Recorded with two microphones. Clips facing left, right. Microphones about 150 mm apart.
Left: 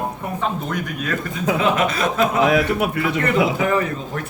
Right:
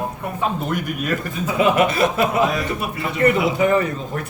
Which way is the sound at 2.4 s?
70° left (ahead or behind).